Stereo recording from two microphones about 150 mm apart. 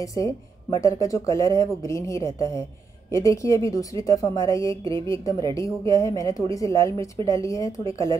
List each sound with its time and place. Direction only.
0.0 s speech: 20° left (ahead or behind)